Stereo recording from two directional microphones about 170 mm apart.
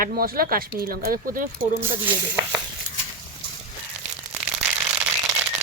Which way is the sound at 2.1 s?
10° right (ahead or behind).